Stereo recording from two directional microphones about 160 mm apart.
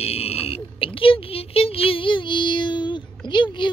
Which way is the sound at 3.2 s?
30° left (ahead or behind).